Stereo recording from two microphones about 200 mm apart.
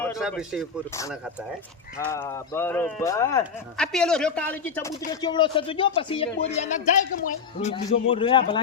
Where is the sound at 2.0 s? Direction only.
10° left (ahead or behind).